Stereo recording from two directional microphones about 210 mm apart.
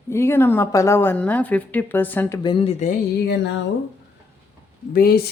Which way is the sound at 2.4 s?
20° left (ahead or behind).